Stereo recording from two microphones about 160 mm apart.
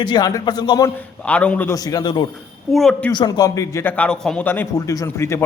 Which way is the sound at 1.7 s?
25° left (ahead or behind).